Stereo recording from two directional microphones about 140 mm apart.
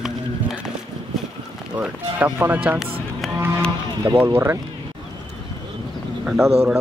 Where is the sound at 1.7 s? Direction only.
10° right (ahead or behind).